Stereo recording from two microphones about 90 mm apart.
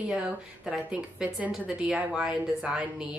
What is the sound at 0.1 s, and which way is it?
A woman's voice, 10° right (ahead or behind).